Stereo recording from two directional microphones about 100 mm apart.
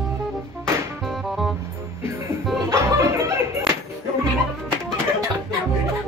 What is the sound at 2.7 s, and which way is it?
Music, 30° right (ahead or behind).